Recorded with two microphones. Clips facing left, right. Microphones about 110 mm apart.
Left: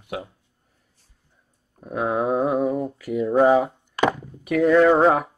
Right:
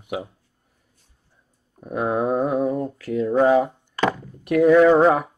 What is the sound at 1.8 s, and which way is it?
Speech, centre (ahead or behind).